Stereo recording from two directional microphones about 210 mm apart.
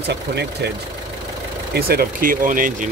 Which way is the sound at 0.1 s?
50° right (ahead or behind).